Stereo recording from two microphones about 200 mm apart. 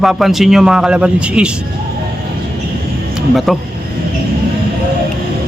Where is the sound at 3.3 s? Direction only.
Centre (ahead or behind).